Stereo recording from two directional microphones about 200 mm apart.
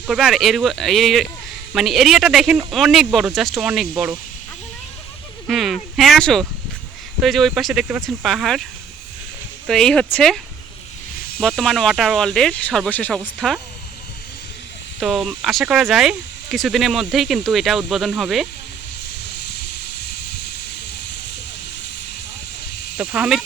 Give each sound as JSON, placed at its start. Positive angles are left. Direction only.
{"t": 0.1, "sound": "speech", "side_deg": 0}
{"t": 5.5, "sound": "speech", "side_deg": 0}
{"t": 9.6, "sound": "speech", "side_deg": 0}
{"t": 11.4, "sound": "speech", "side_deg": 5}
{"t": 15.0, "sound": "speech", "side_deg": 0}
{"t": 23.0, "sound": "speech", "side_deg": -5}